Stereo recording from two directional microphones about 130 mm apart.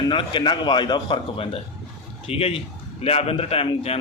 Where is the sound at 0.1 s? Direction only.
40° left (ahead or behind).